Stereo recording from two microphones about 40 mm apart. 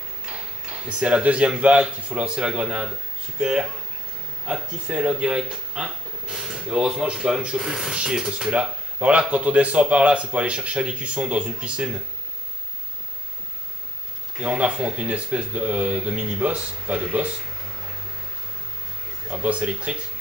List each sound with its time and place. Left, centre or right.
0.2 s a sound: right
0.9 s speech: right
5.8 s a sound: right
6.6 s speech: right
9.3 s speech: right
14.4 s speech: right
19.2 s speech: right